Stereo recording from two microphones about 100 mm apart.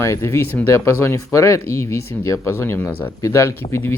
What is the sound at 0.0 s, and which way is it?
Speech, 25° left (ahead or behind).